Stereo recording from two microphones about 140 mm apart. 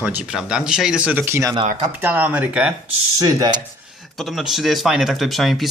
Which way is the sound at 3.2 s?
30° right (ahead or behind).